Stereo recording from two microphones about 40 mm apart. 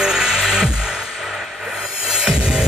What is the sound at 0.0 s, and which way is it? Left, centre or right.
Music, centre.